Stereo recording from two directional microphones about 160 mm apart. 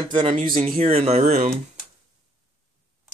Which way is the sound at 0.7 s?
40° right (ahead or behind).